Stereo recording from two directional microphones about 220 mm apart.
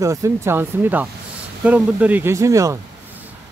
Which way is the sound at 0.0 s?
15° right (ahead or behind).